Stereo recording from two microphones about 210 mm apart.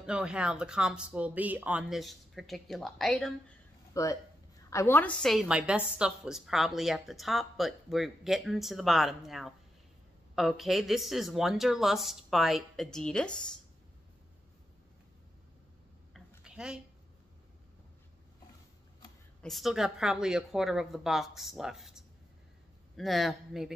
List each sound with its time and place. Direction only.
0.0 s a woman's voice: 5° right (ahead or behind)
3.9 s a woman's voice: 15° left (ahead or behind)
16.1 s a sound: 5° right (ahead or behind)
19.4 s a woman's voice: centre (ahead or behind)